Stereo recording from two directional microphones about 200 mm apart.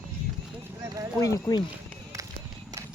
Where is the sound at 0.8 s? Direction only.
15° right (ahead or behind).